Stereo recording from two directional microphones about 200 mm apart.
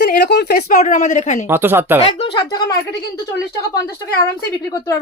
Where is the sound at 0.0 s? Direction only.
55° left (ahead or behind).